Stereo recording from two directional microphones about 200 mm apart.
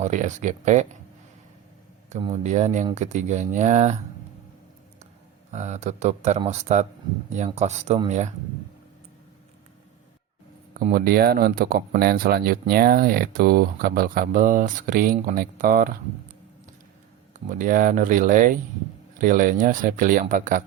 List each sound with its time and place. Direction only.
0.0 s speech: 40° right (ahead or behind)
2.2 s speech: 35° right (ahead or behind)
5.5 s speech: 35° right (ahead or behind)
10.9 s speech: 50° right (ahead or behind)
17.5 s speech: 40° right (ahead or behind)